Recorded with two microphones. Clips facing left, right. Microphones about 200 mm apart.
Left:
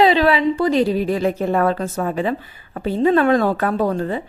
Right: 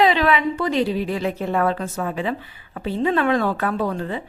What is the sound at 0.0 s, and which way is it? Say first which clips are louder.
A woman's voice: left 3 dB; 35° left (ahead or behind).